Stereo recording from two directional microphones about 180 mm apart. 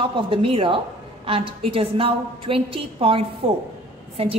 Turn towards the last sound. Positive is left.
turn(degrees=-35)  # may be behind; listen again after turning